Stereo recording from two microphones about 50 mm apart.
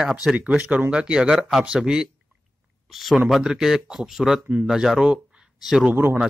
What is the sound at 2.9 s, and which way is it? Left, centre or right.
Speech, centre.